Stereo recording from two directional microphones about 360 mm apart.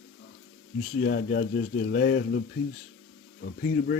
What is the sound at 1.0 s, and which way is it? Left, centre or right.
Speech, left.